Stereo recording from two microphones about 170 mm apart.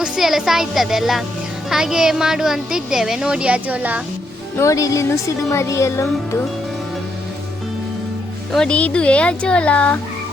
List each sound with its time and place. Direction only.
0.0 s speech: centre (ahead or behind)
4.5 s speech: 20° left (ahead or behind)
8.5 s speech: 5° left (ahead or behind)